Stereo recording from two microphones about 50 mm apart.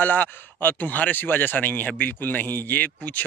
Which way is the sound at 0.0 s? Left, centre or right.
Left.